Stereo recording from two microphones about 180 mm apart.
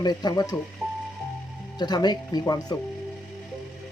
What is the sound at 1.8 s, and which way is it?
Speech, 25° left (ahead or behind).